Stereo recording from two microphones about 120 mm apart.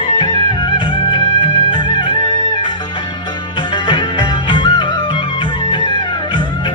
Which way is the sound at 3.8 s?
40° left (ahead or behind).